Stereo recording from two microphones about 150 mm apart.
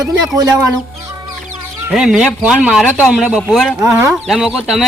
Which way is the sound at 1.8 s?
5° right (ahead or behind).